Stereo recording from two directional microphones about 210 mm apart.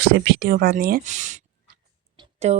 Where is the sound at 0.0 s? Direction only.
45° right (ahead or behind).